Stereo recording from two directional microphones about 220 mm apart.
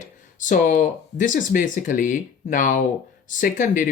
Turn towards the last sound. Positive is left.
turn(degrees=35)  # may be behind; listen again after turning